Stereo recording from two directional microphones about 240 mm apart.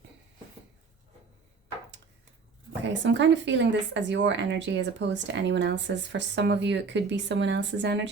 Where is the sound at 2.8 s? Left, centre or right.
Right.